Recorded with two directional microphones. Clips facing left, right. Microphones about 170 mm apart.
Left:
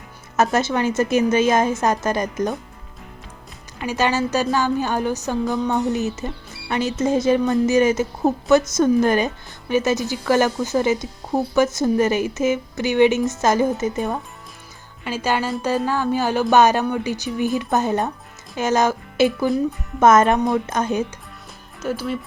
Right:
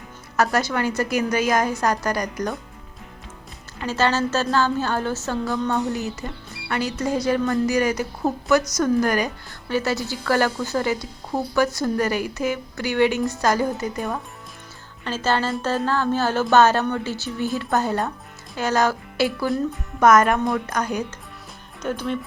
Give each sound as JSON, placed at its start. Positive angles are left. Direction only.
{"t": 0.3, "sound": "a woman's voice", "side_deg": 20}
{"t": 3.8, "sound": "a woman's voice", "side_deg": 15}
{"t": 21.8, "sound": "speech", "side_deg": 5}